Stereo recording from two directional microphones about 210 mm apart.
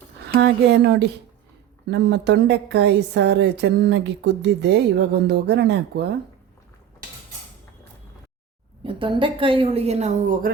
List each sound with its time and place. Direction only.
0.3 s a woman's voice: 55° right (ahead or behind)
8.8 s a woman's voice: 25° right (ahead or behind)